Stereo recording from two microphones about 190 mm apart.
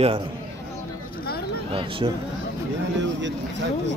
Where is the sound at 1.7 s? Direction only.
30° right (ahead or behind).